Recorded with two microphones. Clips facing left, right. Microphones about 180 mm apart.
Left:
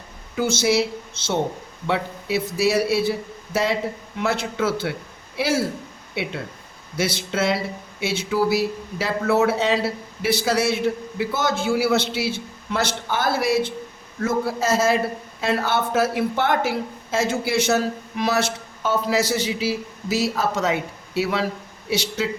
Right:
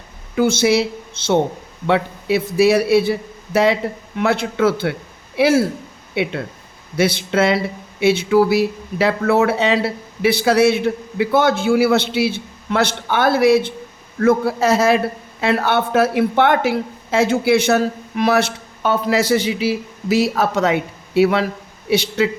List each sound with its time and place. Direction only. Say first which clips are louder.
0.3 s speech: right 5 dB; 60° right (ahead or behind)